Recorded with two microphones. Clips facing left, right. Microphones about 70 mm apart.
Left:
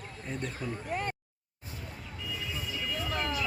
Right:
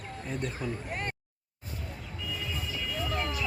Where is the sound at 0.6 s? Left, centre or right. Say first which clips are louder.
Right 2 dB; centre.